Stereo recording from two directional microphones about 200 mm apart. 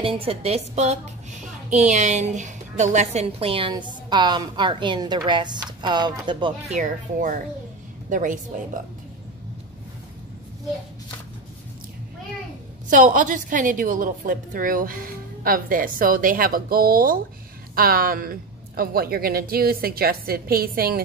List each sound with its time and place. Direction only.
0.0 s a woman's voice: 25° right (ahead or behind)
6.7 s a woman's voice: 40° right (ahead or behind)
12.9 s a woman's voice: 40° right (ahead or behind)